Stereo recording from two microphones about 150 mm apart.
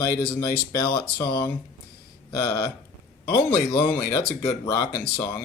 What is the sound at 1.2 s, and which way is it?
Speech, 10° left (ahead or behind).